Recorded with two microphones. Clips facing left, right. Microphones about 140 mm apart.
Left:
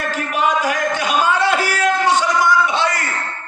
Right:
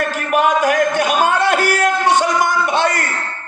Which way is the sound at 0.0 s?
55° right (ahead or behind).